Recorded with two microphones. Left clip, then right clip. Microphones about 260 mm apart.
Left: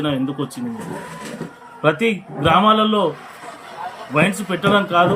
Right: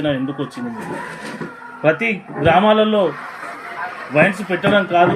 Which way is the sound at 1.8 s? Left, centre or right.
Centre.